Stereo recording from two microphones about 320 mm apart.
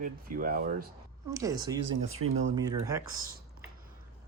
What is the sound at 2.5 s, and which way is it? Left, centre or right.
Speech, centre.